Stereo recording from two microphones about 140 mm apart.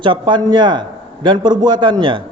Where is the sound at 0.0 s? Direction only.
35° right (ahead or behind).